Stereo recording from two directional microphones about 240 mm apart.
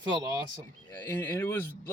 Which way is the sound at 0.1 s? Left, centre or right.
Centre.